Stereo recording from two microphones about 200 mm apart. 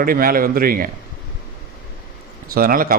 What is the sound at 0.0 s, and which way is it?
Speech, 45° right (ahead or behind).